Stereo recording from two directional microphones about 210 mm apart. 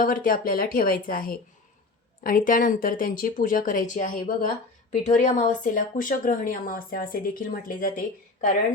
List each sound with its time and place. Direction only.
0.0 s speech: 40° left (ahead or behind)